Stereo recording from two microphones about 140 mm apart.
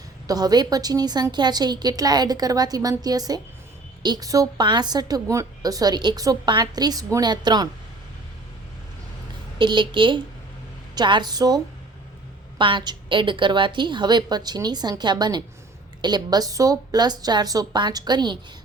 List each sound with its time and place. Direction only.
0.3 s a woman's voice: 25° right (ahead or behind)
9.6 s a woman's voice: 35° right (ahead or behind)